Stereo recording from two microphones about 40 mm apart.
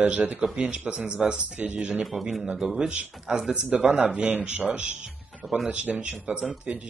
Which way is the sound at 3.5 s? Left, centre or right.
Right.